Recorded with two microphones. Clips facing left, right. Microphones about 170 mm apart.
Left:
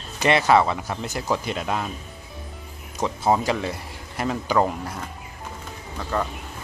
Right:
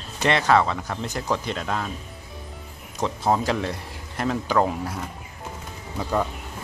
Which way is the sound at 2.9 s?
5° left (ahead or behind).